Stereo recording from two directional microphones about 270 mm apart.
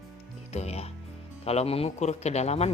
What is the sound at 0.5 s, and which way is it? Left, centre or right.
Music, left.